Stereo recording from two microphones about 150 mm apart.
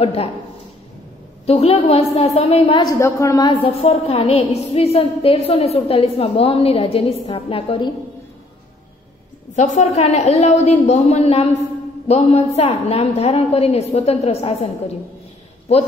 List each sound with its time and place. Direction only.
0.0 s a woman's voice: 40° left (ahead or behind)
1.4 s a woman's voice: 40° left (ahead or behind)
2.8 s a woman's voice: 20° left (ahead or behind)
3.6 s a woman's voice: 40° left (ahead or behind)
9.6 s a woman's voice: 50° left (ahead or behind)